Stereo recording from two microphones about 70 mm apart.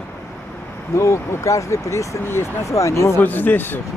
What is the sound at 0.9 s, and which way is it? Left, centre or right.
Speech, left.